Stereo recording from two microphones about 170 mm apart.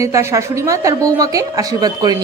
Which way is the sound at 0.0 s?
15° right (ahead or behind).